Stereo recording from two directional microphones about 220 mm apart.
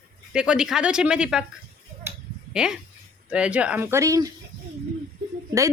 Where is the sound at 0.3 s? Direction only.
5° right (ahead or behind).